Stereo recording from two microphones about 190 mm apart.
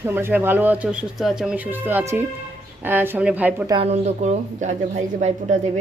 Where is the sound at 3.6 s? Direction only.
30° right (ahead or behind).